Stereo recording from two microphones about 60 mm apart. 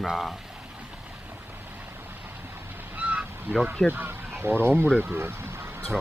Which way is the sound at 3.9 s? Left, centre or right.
Right.